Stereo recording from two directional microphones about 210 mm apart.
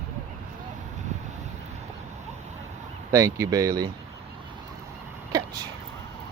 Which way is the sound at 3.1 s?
15° right (ahead or behind).